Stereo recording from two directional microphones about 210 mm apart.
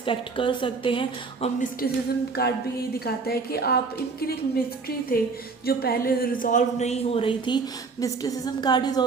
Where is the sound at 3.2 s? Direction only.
50° left (ahead or behind).